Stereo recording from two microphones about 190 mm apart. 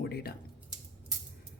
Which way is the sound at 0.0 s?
55° left (ahead or behind).